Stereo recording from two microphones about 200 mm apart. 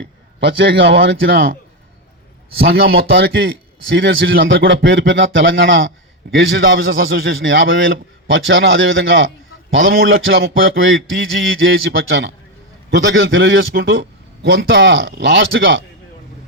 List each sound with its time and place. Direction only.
0.0 s a man's voice: 60° right (ahead or behind)
3.3 s a man's voice: 65° right (ahead or behind)